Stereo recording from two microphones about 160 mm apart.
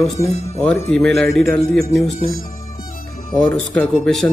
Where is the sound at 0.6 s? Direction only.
5° left (ahead or behind).